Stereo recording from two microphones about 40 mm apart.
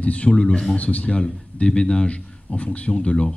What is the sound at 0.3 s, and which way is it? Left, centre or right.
Speech, left.